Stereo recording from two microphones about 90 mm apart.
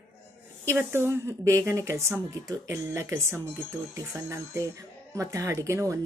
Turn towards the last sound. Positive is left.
turn(degrees=-35)  # may be behind; listen again after turning